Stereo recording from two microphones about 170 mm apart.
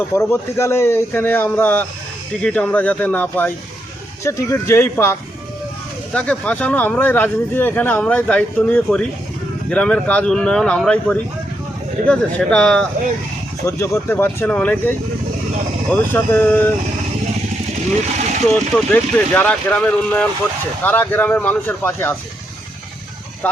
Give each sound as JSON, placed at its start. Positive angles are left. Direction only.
{"t": 0.1, "sound": "speech", "side_deg": 15}
{"t": 6.1, "sound": "speech", "side_deg": 5}
{"t": 13.7, "sound": "speech", "side_deg": 15}
{"t": 18.4, "sound": "speech", "side_deg": 5}